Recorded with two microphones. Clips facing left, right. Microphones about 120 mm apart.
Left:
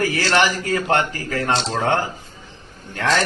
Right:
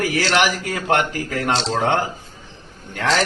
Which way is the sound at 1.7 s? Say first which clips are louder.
Right 1 dB; 15° right (ahead or behind).